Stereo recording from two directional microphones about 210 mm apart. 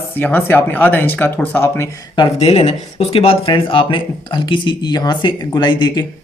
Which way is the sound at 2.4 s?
30° left (ahead or behind).